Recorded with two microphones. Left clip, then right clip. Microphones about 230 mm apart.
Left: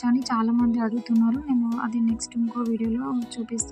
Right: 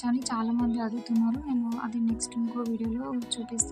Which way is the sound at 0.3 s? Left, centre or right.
Centre.